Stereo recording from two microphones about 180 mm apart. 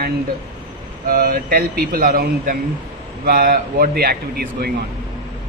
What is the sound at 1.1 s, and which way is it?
A man's voice, 50° right (ahead or behind).